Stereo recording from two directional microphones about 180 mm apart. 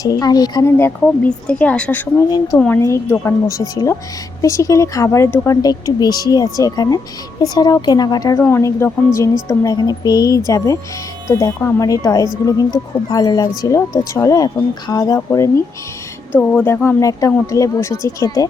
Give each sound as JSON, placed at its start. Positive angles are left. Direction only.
{"t": 0.0, "sound": "speech", "side_deg": 20}